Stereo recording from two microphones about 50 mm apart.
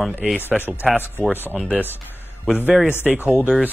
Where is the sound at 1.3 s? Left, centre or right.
Right.